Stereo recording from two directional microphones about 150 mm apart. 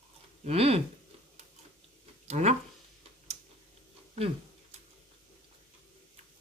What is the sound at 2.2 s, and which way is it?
Speech, 50° right (ahead or behind).